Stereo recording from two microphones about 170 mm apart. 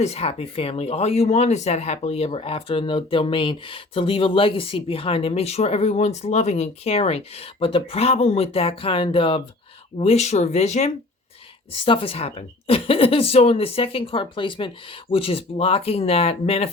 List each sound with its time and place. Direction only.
0.0 s speech: 35° left (ahead or behind)